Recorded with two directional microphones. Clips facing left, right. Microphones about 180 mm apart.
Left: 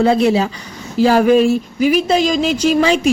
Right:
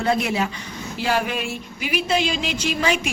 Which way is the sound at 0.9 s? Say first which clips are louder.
Left 13 dB; 40° left (ahead or behind).